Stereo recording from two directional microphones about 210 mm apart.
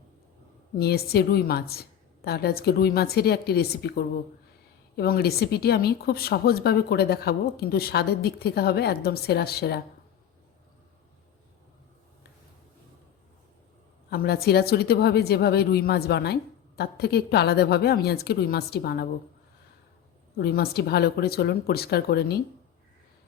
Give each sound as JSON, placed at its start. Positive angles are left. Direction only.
{"t": 0.8, "sound": "a woman's voice", "side_deg": 50}
{"t": 14.1, "sound": "a woman's voice", "side_deg": 45}
{"t": 20.3, "sound": "a woman's voice", "side_deg": 50}